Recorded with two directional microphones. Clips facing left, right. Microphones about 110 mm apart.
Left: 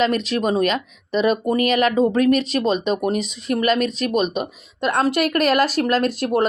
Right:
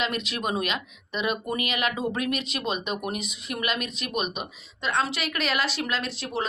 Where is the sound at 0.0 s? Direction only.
35° left (ahead or behind).